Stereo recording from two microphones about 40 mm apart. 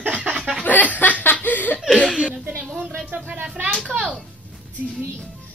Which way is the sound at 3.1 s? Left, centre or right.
Right.